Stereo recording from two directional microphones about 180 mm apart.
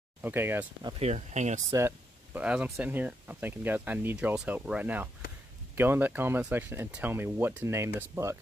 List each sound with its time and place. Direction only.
0.2 s speech: 10° right (ahead or behind)
0.8 s speech: 35° right (ahead or behind)
1.7 s speech: 15° right (ahead or behind)